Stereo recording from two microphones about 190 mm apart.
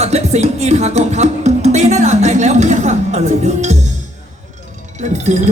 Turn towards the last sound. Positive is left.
turn(degrees=-40)  # may be behind; listen again after turning